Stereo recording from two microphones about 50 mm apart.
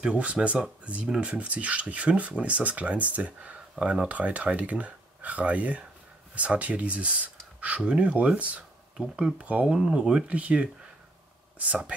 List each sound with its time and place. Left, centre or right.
0.0 s speech: right
1.0 s speech: centre
1.3 s speech: right